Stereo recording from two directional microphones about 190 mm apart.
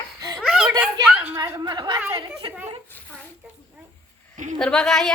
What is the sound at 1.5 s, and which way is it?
A woman's voice, 20° right (ahead or behind).